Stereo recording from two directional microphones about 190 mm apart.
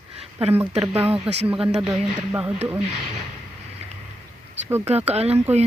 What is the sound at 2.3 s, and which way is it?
Speech, 10° right (ahead or behind).